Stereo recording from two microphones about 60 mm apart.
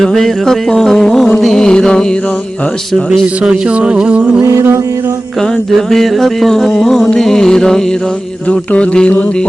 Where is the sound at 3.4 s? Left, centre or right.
Centre.